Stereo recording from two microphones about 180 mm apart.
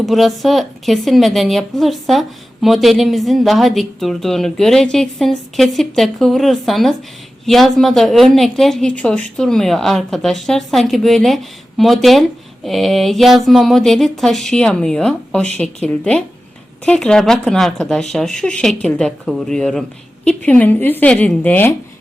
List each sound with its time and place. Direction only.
0.0 s a woman's voice: centre (ahead or behind)